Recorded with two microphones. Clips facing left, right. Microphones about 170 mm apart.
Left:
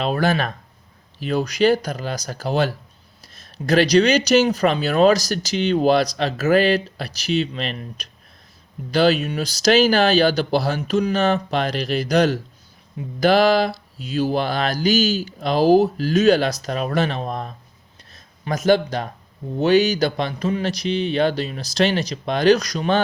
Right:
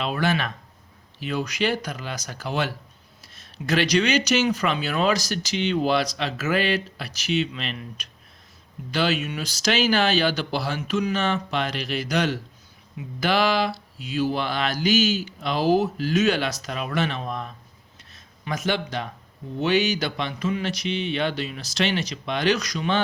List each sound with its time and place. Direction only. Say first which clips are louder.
0.0 s speech: left 4 dB; 40° left (ahead or behind)